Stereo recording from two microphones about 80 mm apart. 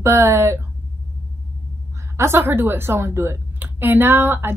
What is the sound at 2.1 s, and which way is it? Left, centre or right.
A woman's voice, right.